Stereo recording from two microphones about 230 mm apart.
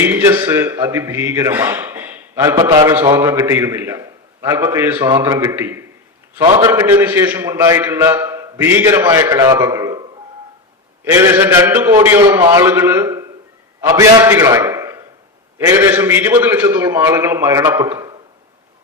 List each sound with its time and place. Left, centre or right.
0.0 s a man's voice: centre
6.4 s a man's voice: right
6.7 s a man's voice: centre